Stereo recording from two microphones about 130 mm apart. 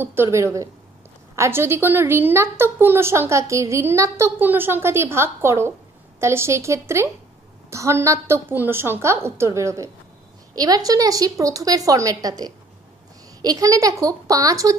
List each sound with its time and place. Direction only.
0.0 s a woman's voice: 15° right (ahead or behind)